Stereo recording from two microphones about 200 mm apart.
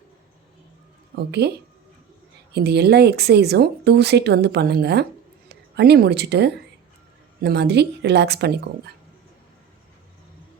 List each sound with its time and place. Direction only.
1.1 s a woman's voice: 55° right (ahead or behind)